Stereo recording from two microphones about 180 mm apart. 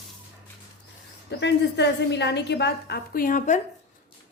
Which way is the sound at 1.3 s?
70° left (ahead or behind).